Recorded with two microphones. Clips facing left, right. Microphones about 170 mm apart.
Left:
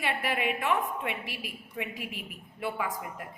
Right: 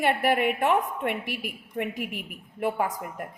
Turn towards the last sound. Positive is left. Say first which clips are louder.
# right 5 dB
turn(degrees=-45)  # may be behind; listen again after turning